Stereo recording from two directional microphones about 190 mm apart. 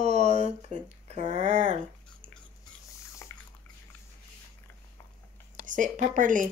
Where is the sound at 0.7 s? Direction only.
35° right (ahead or behind).